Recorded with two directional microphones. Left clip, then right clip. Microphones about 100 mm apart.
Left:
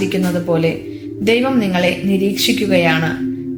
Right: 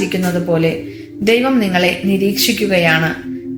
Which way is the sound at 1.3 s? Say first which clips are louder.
Right 2 dB; 45° left (ahead or behind).